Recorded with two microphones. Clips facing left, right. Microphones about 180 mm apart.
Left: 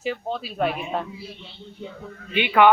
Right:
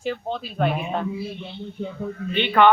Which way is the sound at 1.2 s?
55° right (ahead or behind).